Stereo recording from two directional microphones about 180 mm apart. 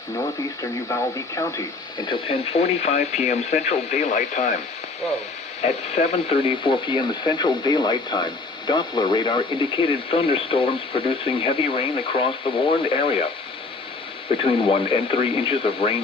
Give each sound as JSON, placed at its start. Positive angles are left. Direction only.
{"t": 2.0, "sound": "speech", "side_deg": 30}
{"t": 5.6, "sound": "speech", "side_deg": 35}
{"t": 14.3, "sound": "speech", "side_deg": 30}